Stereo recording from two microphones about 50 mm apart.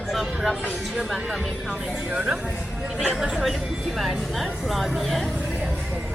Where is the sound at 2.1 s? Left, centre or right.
Right.